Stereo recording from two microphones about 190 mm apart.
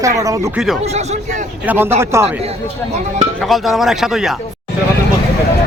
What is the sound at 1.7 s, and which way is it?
Speech, 10° right (ahead or behind).